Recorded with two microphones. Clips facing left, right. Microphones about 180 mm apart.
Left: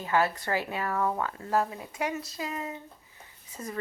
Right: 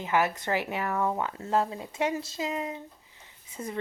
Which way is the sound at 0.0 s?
15° right (ahead or behind).